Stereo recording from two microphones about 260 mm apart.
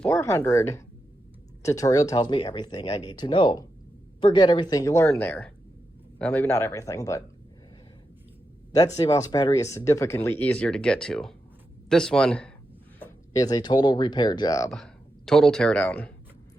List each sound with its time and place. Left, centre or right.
0.0 s speech: centre
9.0 s speech: centre
15.3 s speech: centre